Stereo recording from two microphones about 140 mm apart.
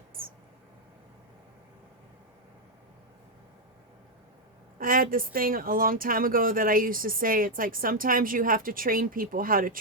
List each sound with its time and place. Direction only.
4.8 s speech: 90° right